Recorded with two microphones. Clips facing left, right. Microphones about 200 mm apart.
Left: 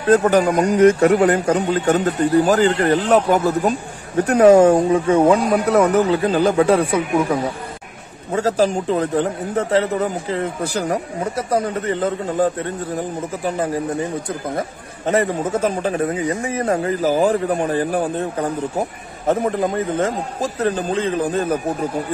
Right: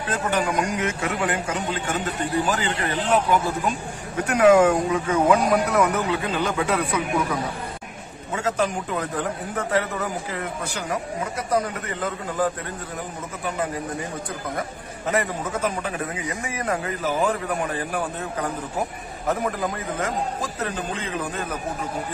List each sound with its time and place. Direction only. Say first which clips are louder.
0.1 s a man's voice: left 11 dB; 40° left (ahead or behind)
15.0 s a man's voice: left 6 dB; 30° left (ahead or behind)